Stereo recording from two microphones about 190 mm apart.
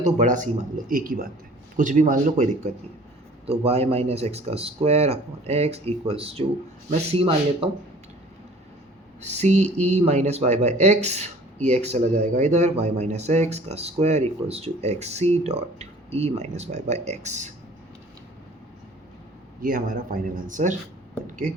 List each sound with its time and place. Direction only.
0.0 s a man's voice: 40° right (ahead or behind)
9.3 s a man's voice: 35° right (ahead or behind)
19.6 s speech: 50° right (ahead or behind)